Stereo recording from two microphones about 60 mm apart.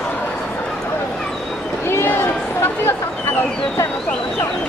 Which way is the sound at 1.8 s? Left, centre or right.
Left.